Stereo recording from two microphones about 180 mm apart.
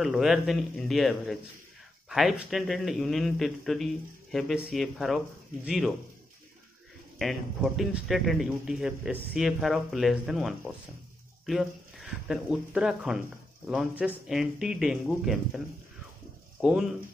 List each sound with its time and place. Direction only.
0.0 s a man's voice: centre (ahead or behind)
7.2 s a man's voice: centre (ahead or behind)
16.6 s a man's voice: 5° right (ahead or behind)